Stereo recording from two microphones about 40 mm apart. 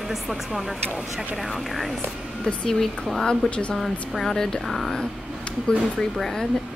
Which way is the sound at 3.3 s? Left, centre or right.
Left.